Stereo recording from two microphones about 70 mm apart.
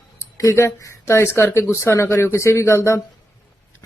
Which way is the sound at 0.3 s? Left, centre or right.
Left.